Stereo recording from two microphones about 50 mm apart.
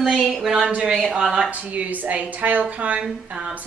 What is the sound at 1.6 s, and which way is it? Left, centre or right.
Speech, right.